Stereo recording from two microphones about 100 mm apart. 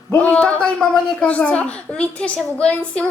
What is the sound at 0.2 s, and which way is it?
A woman's voice, 10° left (ahead or behind).